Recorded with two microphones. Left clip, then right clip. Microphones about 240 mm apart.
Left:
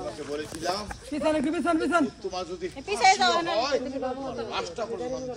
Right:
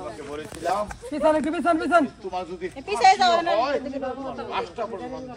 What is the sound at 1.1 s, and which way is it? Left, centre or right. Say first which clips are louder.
Speech: right 5 dB; centre.